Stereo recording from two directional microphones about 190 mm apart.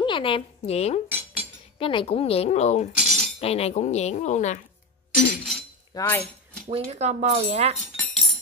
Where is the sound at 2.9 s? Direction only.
Centre (ahead or behind).